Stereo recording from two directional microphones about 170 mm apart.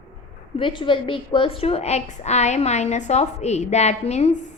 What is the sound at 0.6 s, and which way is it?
A woman's voice, 30° left (ahead or behind).